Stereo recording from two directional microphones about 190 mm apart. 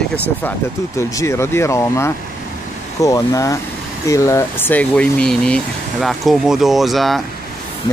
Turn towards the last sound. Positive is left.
turn(degrees=0)  # may be behind; listen again after turning